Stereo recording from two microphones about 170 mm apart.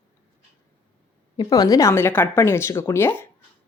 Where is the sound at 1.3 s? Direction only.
25° left (ahead or behind).